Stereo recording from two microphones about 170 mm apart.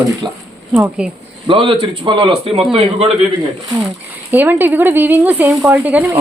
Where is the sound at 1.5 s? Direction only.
30° right (ahead or behind).